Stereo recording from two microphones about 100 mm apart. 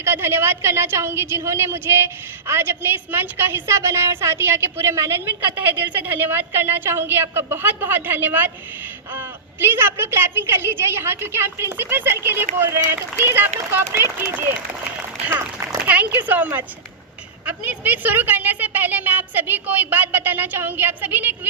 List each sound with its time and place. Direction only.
0.0 s a woman's voice: 25° right (ahead or behind)
15.9 s a woman's voice: 15° right (ahead or behind)